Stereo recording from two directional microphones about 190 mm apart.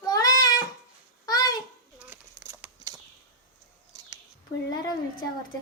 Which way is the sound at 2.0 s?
10° right (ahead or behind).